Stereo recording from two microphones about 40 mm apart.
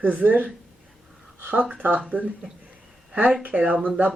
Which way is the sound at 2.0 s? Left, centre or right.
Right.